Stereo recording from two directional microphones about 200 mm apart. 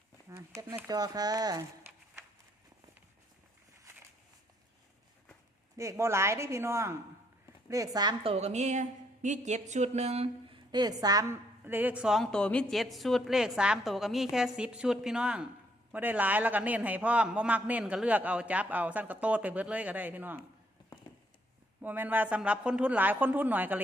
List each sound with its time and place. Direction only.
0.3 s speech: 15° right (ahead or behind)
5.7 s a man's voice: 15° right (ahead or behind)
21.8 s a man's voice: 10° right (ahead or behind)